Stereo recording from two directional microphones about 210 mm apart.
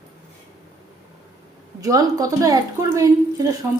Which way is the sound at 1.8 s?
15° right (ahead or behind).